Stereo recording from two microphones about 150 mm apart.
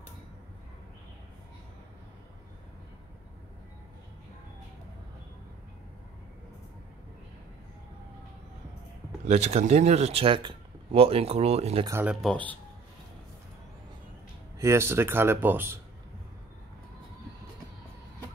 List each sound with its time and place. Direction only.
9.3 s speech: 45° right (ahead or behind)
12.2 s speech: 5° left (ahead or behind)
14.6 s speech: 15° right (ahead or behind)